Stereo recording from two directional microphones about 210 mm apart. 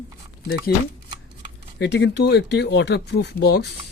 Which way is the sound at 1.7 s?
55° left (ahead or behind).